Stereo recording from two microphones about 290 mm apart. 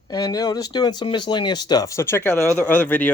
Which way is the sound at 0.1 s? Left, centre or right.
Centre.